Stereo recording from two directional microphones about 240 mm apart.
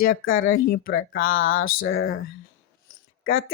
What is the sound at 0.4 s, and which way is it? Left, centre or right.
Speech, left.